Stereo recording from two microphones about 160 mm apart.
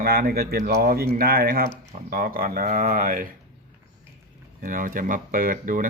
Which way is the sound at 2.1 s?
65° right (ahead or behind).